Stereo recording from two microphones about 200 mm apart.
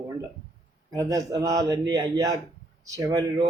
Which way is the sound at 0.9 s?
15° right (ahead or behind).